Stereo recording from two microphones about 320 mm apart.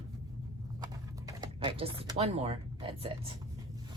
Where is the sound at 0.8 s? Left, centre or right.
Centre.